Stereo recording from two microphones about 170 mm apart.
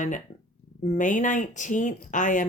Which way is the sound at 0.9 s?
50° left (ahead or behind).